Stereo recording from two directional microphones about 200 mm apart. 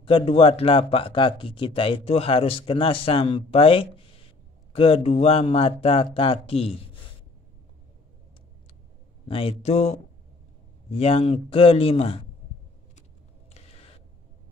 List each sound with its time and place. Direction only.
0.0 s speech: 25° left (ahead or behind)
9.3 s speech: 30° left (ahead or behind)